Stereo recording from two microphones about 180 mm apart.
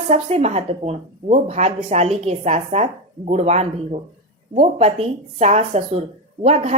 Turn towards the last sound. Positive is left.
turn(degrees=-35)  # may be behind; listen again after turning